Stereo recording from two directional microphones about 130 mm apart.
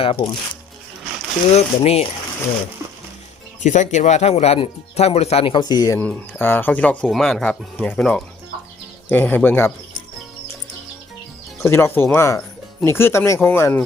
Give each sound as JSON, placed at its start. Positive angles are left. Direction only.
{"t": 0.0, "sound": "speech", "side_deg": 45}
{"t": 1.5, "sound": "speech", "side_deg": 55}
{"t": 3.6, "sound": "speech", "side_deg": 70}
{"t": 6.0, "sound": "speech", "side_deg": 15}
{"t": 11.6, "sound": "speech", "side_deg": 20}